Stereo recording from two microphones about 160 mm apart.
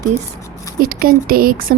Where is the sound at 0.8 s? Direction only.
65° right (ahead or behind).